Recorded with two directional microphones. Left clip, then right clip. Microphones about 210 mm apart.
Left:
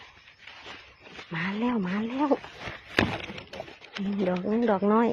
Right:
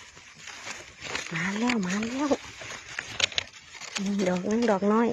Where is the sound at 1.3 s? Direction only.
Centre (ahead or behind).